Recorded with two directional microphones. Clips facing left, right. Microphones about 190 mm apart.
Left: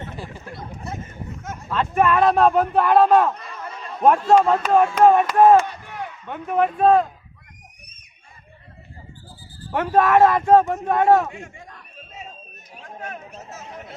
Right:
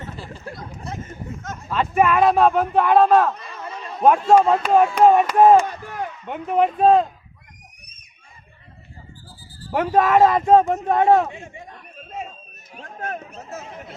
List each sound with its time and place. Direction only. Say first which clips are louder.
1.7 s speech: right 1 dB; 10° right (ahead or behind)
5.6 s a sound: right 3 dB; 45° right (ahead or behind)
6.2 s a man's voice: right 1 dB; 15° right (ahead or behind)
9.7 s a man's voice: even; 15° right (ahead or behind)
13.0 s speech: right 5 dB; 50° right (ahead or behind)